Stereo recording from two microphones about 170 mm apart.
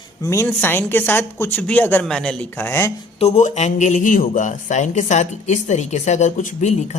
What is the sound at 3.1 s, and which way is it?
A man's voice, 40° left (ahead or behind).